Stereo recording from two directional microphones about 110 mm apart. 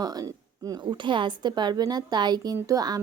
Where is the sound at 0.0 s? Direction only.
35° right (ahead or behind).